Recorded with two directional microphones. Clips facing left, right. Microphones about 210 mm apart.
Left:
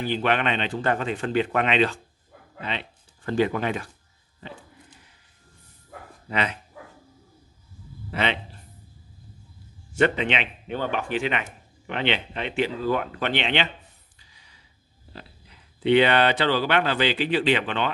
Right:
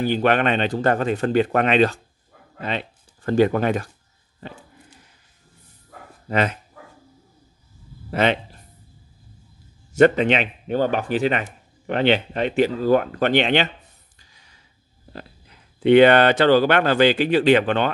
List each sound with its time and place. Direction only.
0.0 s speech: 45° right (ahead or behind)
6.2 s speech: 45° right (ahead or behind)
8.1 s speech: 45° right (ahead or behind)
9.9 s speech: 45° right (ahead or behind)
14.3 s gasp: 45° right (ahead or behind)
15.1 s speech: 50° right (ahead or behind)